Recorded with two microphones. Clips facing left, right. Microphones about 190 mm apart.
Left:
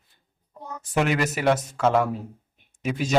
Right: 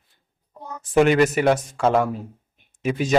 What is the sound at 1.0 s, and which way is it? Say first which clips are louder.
Speech: right 6 dB; 5° left (ahead or behind).